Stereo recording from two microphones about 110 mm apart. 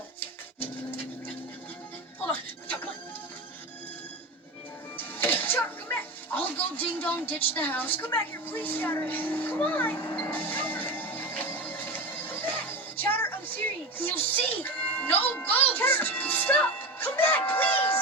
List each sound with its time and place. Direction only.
2.2 s music: 15° left (ahead or behind)
4.9 s music: 15° left (ahead or behind)
7.0 s a sound: 15° left (ahead or behind)
13.0 s music: 20° left (ahead or behind)
14.0 s speech: 15° left (ahead or behind)